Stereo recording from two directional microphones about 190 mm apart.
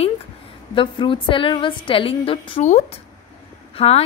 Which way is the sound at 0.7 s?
25° left (ahead or behind).